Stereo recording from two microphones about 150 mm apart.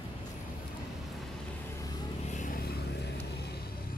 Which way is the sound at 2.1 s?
50° left (ahead or behind).